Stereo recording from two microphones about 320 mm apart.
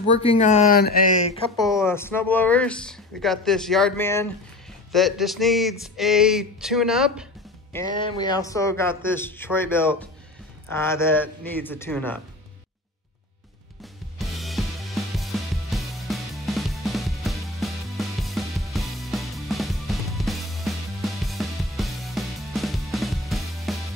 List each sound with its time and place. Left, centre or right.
0.2 s speech: centre
1.7 s speech: centre
7.7 s a man's voice: centre
14.1 s music: centre